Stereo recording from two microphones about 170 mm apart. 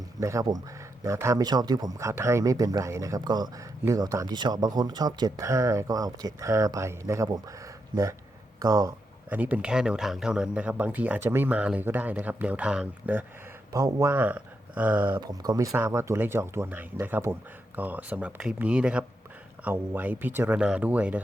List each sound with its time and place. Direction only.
0.2 s a man's voice: 20° right (ahead or behind)
9.3 s speech: 10° right (ahead or behind)
15.2 s speech: 20° right (ahead or behind)